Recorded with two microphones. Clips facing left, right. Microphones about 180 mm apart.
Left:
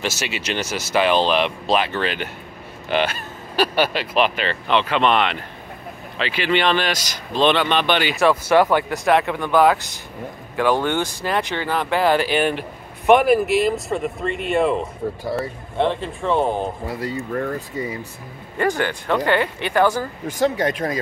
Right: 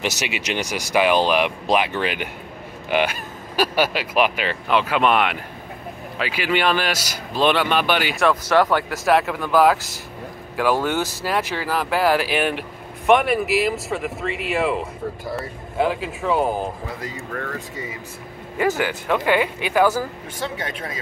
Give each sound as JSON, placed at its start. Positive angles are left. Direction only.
{"t": 0.0, "sound": "speech", "side_deg": -15}
{"t": 17.0, "sound": "speech", "side_deg": 30}
{"t": 18.6, "sound": "speech", "side_deg": -5}
{"t": 20.4, "sound": "speech", "side_deg": 40}